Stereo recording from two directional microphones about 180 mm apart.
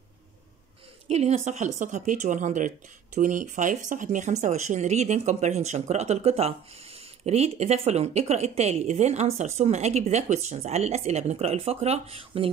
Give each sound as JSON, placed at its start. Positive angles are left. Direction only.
{"t": 1.0, "sound": "speech", "side_deg": -35}